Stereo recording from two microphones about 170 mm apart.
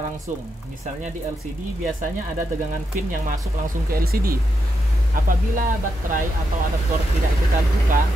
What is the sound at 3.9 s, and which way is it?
Speech, 60° right (ahead or behind).